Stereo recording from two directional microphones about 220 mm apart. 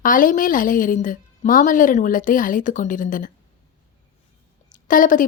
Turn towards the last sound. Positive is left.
turn(degrees=35)  # may be behind; listen again after turning